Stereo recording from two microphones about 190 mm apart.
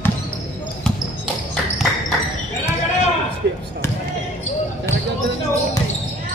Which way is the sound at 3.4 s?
65° right (ahead or behind).